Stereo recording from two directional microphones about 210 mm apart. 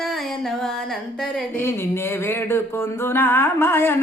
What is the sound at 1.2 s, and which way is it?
Speech, 5° left (ahead or behind).